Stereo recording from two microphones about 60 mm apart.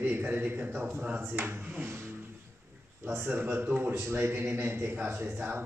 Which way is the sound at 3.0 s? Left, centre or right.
Right.